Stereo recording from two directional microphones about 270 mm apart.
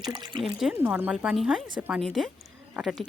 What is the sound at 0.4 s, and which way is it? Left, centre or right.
Speech, centre.